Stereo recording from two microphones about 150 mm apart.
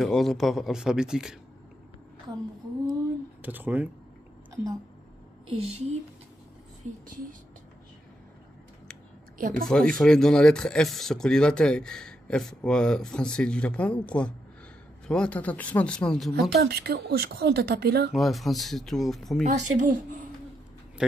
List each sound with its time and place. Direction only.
0.0 s speech: centre (ahead or behind)
3.4 s speech: 10° right (ahead or behind)
5.5 s a woman's voice: 40° right (ahead or behind)
9.4 s speech: 65° right (ahead or behind)
9.7 s speech: 5° left (ahead or behind)
16.5 s speech: 90° right
18.1 s speech: centre (ahead or behind)
19.4 s a woman's voice: 55° right (ahead or behind)